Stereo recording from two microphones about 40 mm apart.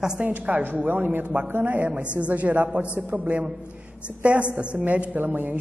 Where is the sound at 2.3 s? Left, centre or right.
Right.